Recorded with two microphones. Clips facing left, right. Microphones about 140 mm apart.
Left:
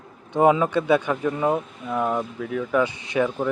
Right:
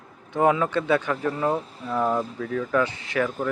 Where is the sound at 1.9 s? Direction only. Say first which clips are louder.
Even; centre (ahead or behind); by 3.3 s 20° left (ahead or behind).